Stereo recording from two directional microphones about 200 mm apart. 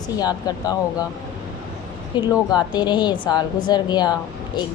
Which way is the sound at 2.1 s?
20° left (ahead or behind).